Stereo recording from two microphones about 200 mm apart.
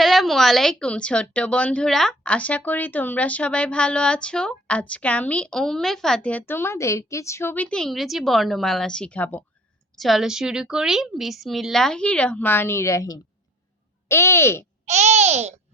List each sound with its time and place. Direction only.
0.0 s a woman's voice: centre (ahead or behind)
14.8 s a child's voice: 35° right (ahead or behind)